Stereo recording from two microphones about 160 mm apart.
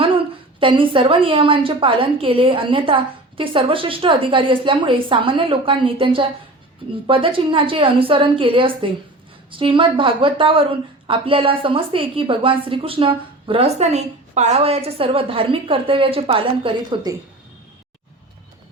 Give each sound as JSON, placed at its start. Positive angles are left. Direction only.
{"t": 0.6, "sound": "a woman's voice", "side_deg": -30}